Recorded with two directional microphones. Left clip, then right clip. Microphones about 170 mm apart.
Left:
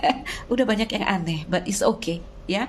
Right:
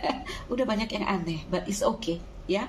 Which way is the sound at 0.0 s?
55° left (ahead or behind).